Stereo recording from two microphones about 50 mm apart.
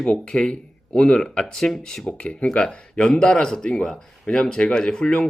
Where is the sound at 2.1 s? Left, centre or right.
Left.